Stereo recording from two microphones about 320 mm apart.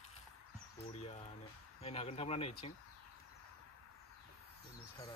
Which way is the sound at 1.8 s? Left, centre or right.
Centre.